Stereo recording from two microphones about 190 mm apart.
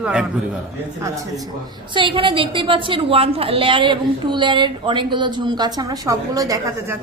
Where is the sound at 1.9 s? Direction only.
25° right (ahead or behind).